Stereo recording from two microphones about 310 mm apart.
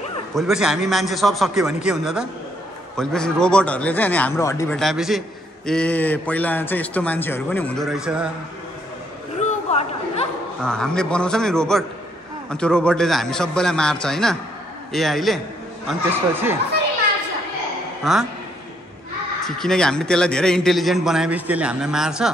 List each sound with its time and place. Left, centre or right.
0.3 s a man's voice: centre
9.4 s a sound: left
10.6 s a man's voice: centre
18.0 s a man's voice: centre
19.4 s a man's voice: centre